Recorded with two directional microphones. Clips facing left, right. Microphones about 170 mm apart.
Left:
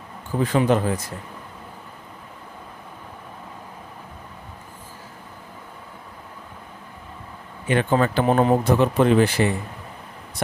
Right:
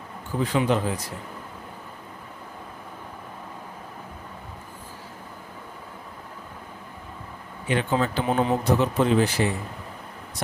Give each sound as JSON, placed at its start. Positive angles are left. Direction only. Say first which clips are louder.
{"t": 0.4, "sound": "speech", "louder": "left 4 dB", "side_deg": 50}
{"t": 7.7, "sound": "speech", "louder": "left 4 dB", "side_deg": 55}